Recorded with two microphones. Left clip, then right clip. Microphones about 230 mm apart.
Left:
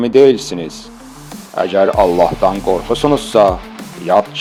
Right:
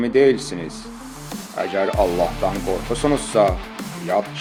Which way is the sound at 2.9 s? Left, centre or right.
Left.